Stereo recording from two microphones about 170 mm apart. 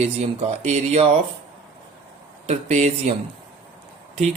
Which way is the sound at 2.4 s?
40° right (ahead or behind).